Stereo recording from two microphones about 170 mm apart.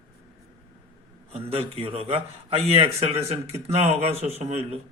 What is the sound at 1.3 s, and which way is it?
Speech, 35° right (ahead or behind).